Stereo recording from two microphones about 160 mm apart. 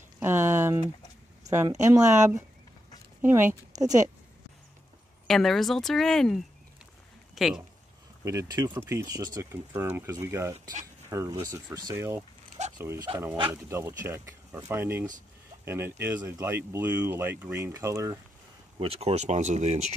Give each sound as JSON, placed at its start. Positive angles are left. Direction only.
{"t": 0.2, "sound": "a sound", "side_deg": -15}
{"t": 1.5, "sound": "speech", "side_deg": -15}
{"t": 5.2, "sound": "speech", "side_deg": 0}
{"t": 8.2, "sound": "speech", "side_deg": -20}
{"t": 18.8, "sound": "speech", "side_deg": -40}